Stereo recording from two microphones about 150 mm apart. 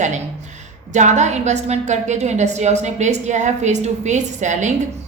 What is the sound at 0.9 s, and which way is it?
A woman's voice, 50° right (ahead or behind).